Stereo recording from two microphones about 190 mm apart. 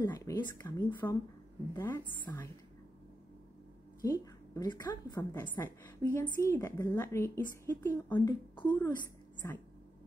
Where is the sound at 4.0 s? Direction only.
20° left (ahead or behind).